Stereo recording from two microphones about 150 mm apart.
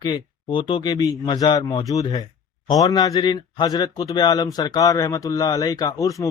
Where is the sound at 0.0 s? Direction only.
30° left (ahead or behind).